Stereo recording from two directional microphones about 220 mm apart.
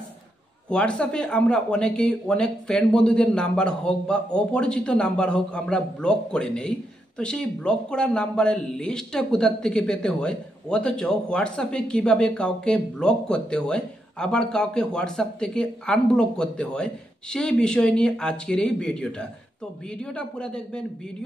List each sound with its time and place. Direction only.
0.7 s speech: 5° left (ahead or behind)